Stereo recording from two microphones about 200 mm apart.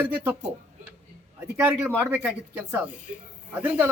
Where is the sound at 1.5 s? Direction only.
10° right (ahead or behind).